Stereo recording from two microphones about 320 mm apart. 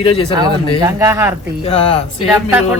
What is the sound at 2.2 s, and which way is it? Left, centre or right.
Speech, centre.